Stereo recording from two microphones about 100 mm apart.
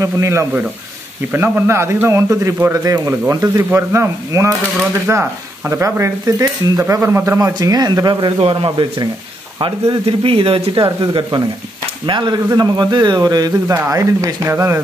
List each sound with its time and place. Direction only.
0.0 s a man's voice: 30° right (ahead or behind)
7.3 s a man's voice: 35° right (ahead or behind)
8.4 s speech: 70° right (ahead or behind)
10.8 s a man's voice: 50° right (ahead or behind); by 14.8 s 25° right (ahead or behind)